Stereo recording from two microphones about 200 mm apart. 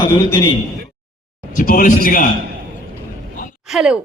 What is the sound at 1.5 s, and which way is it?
Speech, 45° left (ahead or behind).